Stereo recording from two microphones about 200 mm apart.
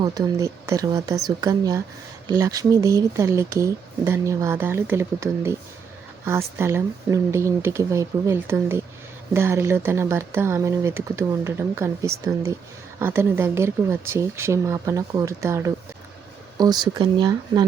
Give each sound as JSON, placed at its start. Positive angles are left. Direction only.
{"t": 0.0, "sound": "speech", "side_deg": -20}